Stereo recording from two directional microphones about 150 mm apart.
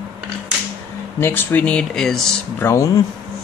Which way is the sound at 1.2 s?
15° left (ahead or behind).